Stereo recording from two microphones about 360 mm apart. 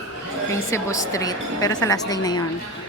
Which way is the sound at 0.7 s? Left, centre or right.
Centre.